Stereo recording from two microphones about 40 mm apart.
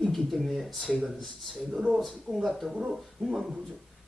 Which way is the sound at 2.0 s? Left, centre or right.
Centre.